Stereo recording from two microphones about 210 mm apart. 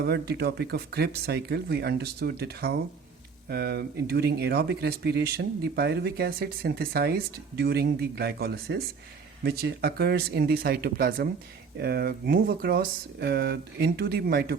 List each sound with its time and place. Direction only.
0.0 s speech: 50° right (ahead or behind)